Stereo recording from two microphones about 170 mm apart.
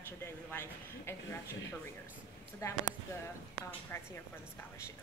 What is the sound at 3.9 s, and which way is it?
Speech, 15° left (ahead or behind).